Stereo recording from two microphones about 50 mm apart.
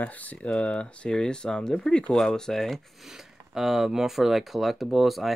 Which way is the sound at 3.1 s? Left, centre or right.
Centre.